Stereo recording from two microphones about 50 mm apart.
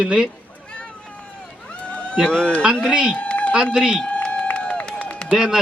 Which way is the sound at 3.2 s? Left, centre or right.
Left.